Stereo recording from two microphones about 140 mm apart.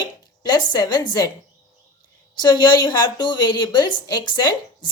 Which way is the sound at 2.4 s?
30° left (ahead or behind).